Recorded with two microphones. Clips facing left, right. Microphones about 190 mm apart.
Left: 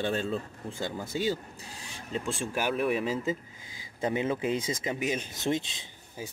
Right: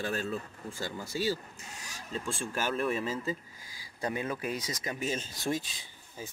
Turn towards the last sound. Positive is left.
turn(degrees=20)  # may be behind; listen again after turning